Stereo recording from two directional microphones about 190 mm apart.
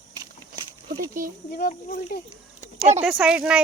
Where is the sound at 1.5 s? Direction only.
55° left (ahead or behind).